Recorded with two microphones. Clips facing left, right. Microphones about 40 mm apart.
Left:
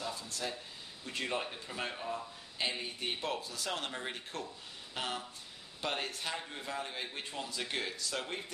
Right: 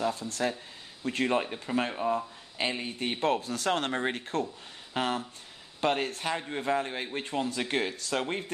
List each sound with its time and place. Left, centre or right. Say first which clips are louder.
0.1 s speech: right 9 dB; right
1.4 s speech: right 9 dB; right